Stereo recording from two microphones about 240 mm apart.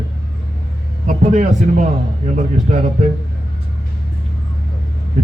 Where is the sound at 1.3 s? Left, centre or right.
Right.